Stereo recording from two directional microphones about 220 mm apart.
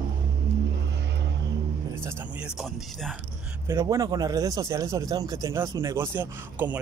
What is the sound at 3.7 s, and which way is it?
Speech, 15° right (ahead or behind).